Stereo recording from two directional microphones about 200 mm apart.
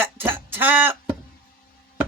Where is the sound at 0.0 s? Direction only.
10° right (ahead or behind).